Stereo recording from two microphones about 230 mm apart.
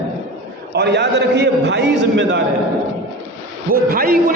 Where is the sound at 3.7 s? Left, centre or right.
Right.